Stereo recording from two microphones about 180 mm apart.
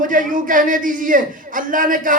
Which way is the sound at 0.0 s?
50° right (ahead or behind).